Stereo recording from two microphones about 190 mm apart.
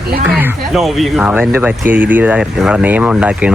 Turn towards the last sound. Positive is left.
turn(degrees=-5)  # may be behind; listen again after turning